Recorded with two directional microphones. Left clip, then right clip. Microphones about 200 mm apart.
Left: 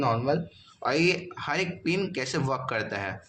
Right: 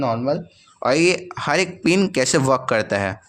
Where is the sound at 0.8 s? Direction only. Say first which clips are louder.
Right 8 dB; 70° right (ahead or behind).